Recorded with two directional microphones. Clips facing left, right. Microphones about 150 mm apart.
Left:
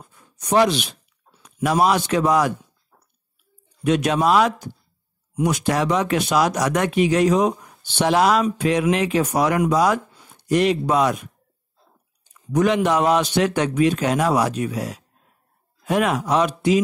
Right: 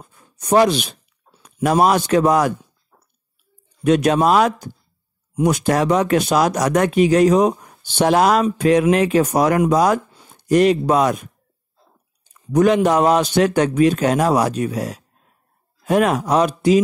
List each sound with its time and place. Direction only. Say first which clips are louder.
0.0 s a sound: right 2 dB; 40° right (ahead or behind)
1.4 s a man's voice: right 3 dB; 45° right (ahead or behind)
3.8 s speech: right 4 dB; 45° right (ahead or behind)
10.1 s a sound: right 2 dB; 30° right (ahead or behind)
10.5 s speech: right 4 dB; 45° right (ahead or behind)
12.5 s a man's voice: right 4 dB; 40° right (ahead or behind)